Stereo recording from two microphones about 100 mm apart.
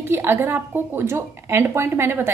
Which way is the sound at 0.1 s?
20° right (ahead or behind).